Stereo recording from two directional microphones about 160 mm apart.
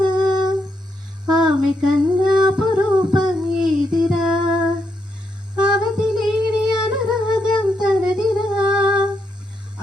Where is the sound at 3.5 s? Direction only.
5° right (ahead or behind).